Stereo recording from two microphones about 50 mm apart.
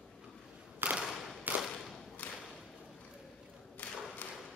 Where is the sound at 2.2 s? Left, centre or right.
Left.